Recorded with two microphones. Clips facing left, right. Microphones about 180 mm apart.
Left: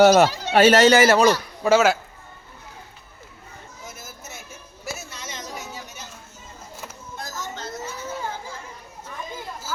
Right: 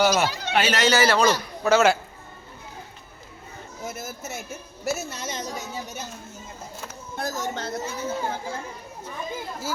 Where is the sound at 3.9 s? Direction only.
55° right (ahead or behind).